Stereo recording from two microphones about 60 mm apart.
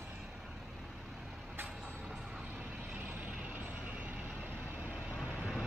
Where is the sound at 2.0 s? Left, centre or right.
Centre.